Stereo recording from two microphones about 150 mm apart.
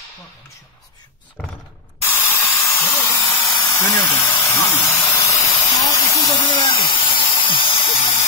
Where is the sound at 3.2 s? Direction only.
15° left (ahead or behind).